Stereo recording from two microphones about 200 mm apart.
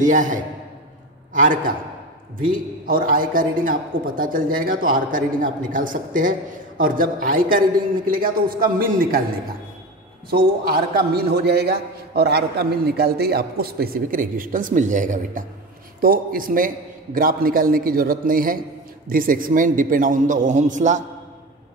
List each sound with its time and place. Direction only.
0.0 s a man's voice: 40° right (ahead or behind)
10.3 s a man's voice: 50° right (ahead or behind)